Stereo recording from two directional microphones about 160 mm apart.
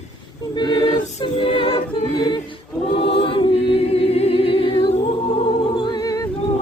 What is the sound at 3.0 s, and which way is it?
Choir, 35° left (ahead or behind).